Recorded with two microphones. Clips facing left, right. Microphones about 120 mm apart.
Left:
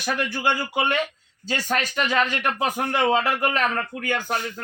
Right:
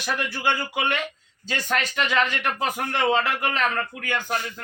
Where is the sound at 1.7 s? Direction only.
10° left (ahead or behind).